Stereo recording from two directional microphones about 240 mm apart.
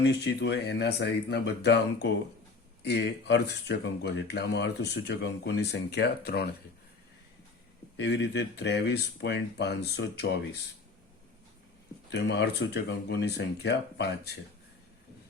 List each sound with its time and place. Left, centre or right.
0.0 s speech: left
7.9 s speech: left
12.1 s speech: left